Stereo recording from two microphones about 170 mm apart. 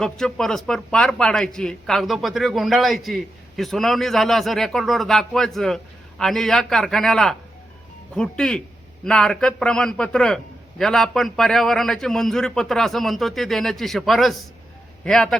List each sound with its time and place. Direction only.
0.0 s a man's voice: 5° left (ahead or behind)